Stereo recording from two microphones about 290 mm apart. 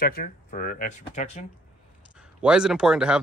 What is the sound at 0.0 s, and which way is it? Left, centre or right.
Speech, left.